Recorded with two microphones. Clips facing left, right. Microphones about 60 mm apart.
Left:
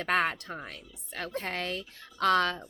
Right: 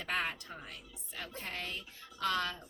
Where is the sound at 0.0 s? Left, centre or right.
Left.